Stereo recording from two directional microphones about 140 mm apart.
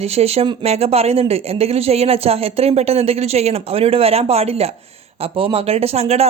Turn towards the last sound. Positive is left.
turn(degrees=-50)  # may be behind; listen again after turning